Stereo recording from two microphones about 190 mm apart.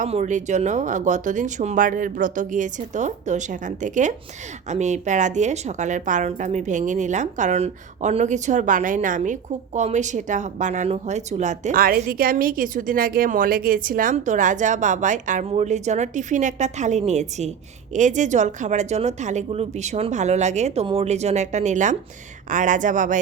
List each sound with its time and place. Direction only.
0.0 s a woman's voice: 40° right (ahead or behind)